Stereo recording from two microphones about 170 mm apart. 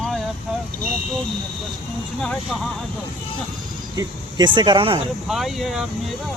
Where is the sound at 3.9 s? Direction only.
20° right (ahead or behind).